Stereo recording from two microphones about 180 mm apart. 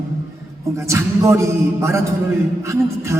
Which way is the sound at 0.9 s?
15° right (ahead or behind).